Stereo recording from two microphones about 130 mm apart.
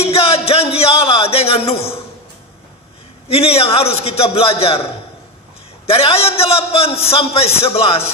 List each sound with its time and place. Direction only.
0.0 s a sound: 50° left (ahead or behind)
3.3 s a man's voice: 50° left (ahead or behind)
5.9 s a man's voice: 50° left (ahead or behind)